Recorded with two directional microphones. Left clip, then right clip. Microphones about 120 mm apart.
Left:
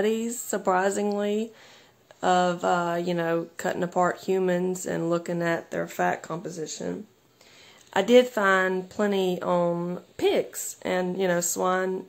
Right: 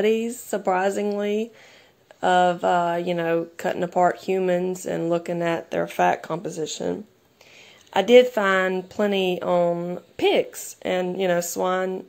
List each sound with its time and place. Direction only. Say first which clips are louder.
0.0 s speech: right 5 dB; 15° right (ahead or behind)
5.8 s speech: right 6 dB; 30° right (ahead or behind)
7.9 s speech: right 4 dB; 10° right (ahead or behind)